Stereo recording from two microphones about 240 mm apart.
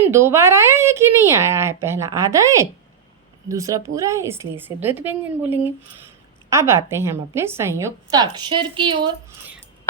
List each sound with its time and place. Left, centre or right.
0.0 s speech: centre